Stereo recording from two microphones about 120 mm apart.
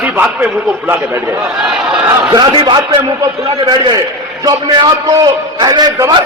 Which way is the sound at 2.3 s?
45° right (ahead or behind).